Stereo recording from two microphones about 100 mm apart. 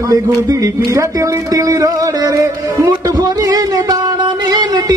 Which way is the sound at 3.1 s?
40° right (ahead or behind).